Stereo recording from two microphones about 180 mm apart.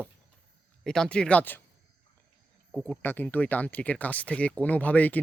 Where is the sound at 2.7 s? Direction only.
5° left (ahead or behind).